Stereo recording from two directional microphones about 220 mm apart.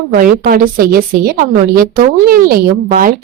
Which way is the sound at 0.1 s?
40° right (ahead or behind).